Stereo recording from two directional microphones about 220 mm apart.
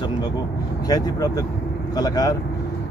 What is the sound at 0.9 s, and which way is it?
Speech, 15° left (ahead or behind).